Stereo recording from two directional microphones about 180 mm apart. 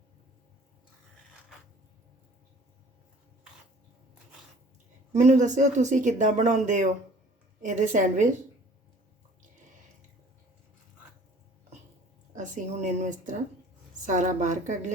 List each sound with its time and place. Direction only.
5.1 s speech: 40° right (ahead or behind)
12.3 s a woman's voice: 40° right (ahead or behind)